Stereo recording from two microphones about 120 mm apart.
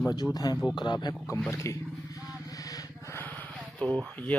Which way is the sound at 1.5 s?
25° left (ahead or behind).